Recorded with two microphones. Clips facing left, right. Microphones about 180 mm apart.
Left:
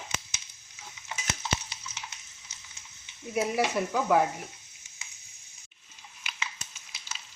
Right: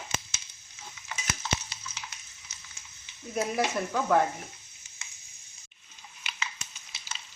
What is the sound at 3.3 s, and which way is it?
Speech, 10° left (ahead or behind).